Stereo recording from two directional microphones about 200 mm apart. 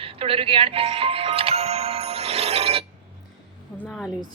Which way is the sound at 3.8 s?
5° left (ahead or behind).